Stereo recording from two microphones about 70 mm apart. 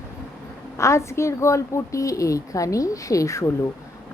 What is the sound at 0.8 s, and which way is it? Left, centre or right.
A woman's voice, left.